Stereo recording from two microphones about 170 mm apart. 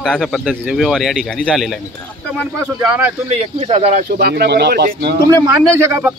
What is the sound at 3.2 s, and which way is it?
Speech, 35° right (ahead or behind).